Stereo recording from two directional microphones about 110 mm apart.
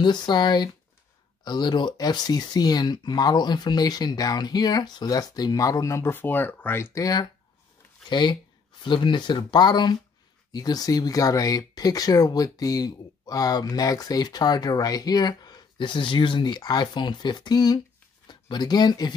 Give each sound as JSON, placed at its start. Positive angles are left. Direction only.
{"t": 0.0, "sound": "speech", "side_deg": 40}
{"t": 8.1, "sound": "speech", "side_deg": 45}